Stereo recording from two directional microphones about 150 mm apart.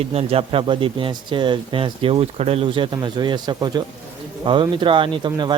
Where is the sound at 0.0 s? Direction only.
45° right (ahead or behind).